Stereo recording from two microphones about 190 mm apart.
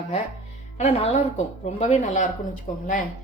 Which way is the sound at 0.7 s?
35° left (ahead or behind).